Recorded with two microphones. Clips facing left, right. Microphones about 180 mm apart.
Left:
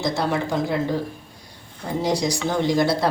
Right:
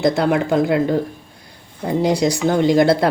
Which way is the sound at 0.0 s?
60° right (ahead or behind).